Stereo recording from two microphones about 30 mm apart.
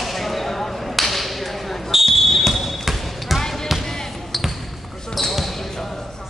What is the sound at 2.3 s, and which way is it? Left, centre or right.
Basketball bounce, centre.